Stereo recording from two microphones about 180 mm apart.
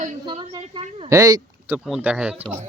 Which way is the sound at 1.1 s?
20° right (ahead or behind).